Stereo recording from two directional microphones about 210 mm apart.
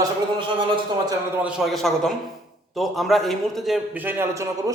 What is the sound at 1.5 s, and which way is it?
A man's voice, centre (ahead or behind).